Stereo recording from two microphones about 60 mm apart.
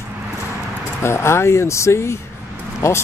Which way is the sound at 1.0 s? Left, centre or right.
Left.